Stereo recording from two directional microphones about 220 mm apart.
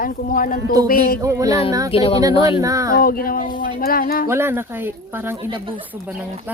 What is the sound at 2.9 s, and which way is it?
Speech, 40° left (ahead or behind).